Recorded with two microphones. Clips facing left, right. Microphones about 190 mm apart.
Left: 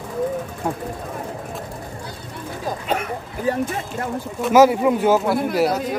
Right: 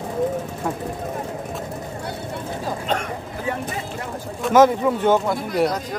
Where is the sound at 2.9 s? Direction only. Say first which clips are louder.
Left 1 dB; 10° left (ahead or behind).